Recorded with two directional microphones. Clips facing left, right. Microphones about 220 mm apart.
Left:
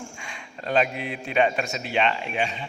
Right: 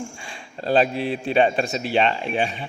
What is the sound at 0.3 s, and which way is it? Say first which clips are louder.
A man's voice: right 6 dB; 35° right (ahead or behind).